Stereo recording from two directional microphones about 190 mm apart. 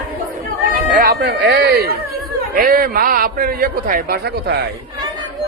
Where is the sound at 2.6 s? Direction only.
50° right (ahead or behind).